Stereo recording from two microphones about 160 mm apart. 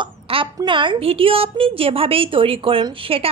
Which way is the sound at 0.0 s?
30° right (ahead or behind).